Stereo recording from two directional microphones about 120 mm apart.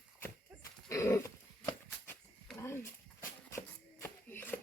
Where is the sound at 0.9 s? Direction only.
25° left (ahead or behind).